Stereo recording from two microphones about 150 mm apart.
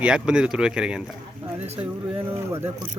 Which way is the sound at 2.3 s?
15° right (ahead or behind).